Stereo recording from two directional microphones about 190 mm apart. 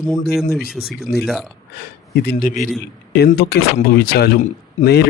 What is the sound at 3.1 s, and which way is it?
Speech, 55° left (ahead or behind).